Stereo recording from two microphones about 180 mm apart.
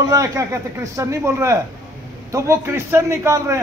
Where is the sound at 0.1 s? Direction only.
15° right (ahead or behind).